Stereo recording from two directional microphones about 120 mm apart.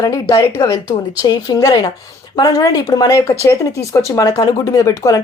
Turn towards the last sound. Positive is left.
turn(degrees=25)  # may be behind; listen again after turning